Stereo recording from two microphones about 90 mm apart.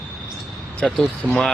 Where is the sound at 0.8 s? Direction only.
5° left (ahead or behind).